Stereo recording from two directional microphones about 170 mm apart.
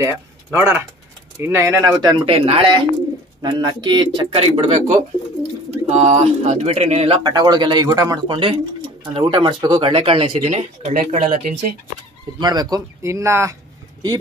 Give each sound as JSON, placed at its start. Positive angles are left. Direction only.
{"t": 0.0, "sound": "speech", "side_deg": -15}
{"t": 7.2, "sound": "speech", "side_deg": -25}
{"t": 12.4, "sound": "speech", "side_deg": -25}